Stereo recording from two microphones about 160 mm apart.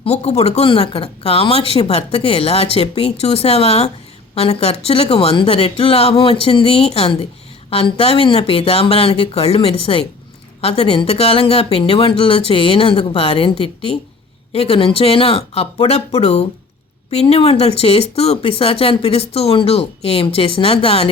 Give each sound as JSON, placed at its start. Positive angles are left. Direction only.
{"t": 0.0, "sound": "speech", "side_deg": 40}